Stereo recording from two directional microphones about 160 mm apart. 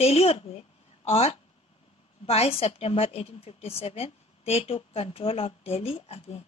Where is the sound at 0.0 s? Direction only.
40° left (ahead or behind).